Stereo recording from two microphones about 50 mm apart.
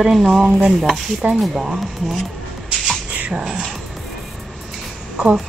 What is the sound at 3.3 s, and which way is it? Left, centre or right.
Speech, centre.